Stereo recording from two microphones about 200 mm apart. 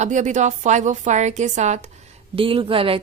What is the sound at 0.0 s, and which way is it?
A woman's voice, 35° right (ahead or behind).